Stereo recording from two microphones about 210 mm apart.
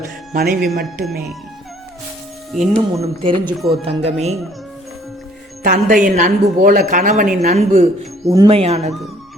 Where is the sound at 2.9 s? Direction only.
25° right (ahead or behind).